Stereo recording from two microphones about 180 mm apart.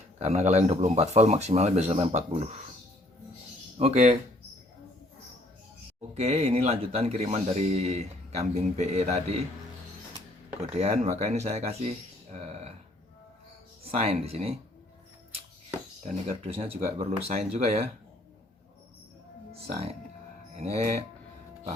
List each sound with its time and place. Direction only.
0.2 s speech: 40° right (ahead or behind)
3.8 s speech: 35° right (ahead or behind)
6.1 s speech: 35° right (ahead or behind)
10.6 s speech: 40° right (ahead or behind)
13.9 s speech: 35° right (ahead or behind)
16.4 s speech: 35° right (ahead or behind)
19.6 s speech: 35° right (ahead or behind)